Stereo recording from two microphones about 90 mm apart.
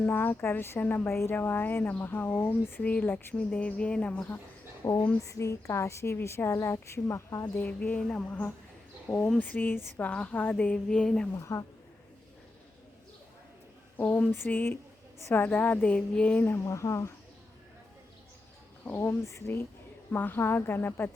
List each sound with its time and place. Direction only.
0.0 s a woman's voice: 20° left (ahead or behind)
4.8 s a woman's voice: 35° left (ahead or behind)
7.5 s a woman's voice: 20° left (ahead or behind)
10.1 s speech: 15° left (ahead or behind)
11.3 s a woman's voice: 35° left (ahead or behind)
13.9 s a woman's voice: 15° left (ahead or behind)
16.6 s a woman's voice: 35° left (ahead or behind)
18.9 s a woman's voice: 35° left (ahead or behind)